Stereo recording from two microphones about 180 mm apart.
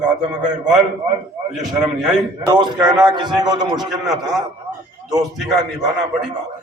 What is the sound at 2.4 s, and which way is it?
A man's voice, 20° right (ahead or behind).